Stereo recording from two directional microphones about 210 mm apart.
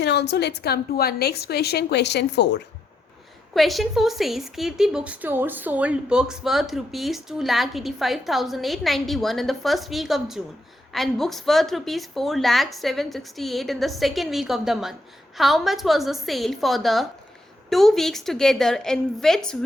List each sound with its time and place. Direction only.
0.0 s a woman's voice: 55° left (ahead or behind)
3.5 s a woman's voice: centre (ahead or behind)